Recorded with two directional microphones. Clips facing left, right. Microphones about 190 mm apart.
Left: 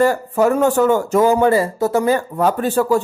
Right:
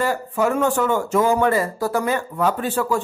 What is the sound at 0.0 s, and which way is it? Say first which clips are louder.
Speech: left 6 dB; 45° left (ahead or behind).